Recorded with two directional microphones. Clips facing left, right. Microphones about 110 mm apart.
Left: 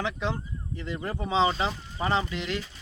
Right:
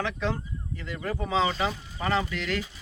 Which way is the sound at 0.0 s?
20° left (ahead or behind).